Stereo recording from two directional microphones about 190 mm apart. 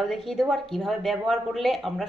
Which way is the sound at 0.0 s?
Centre (ahead or behind).